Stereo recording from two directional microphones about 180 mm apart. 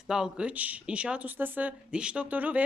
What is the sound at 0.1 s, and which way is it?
Speech, 5° right (ahead or behind).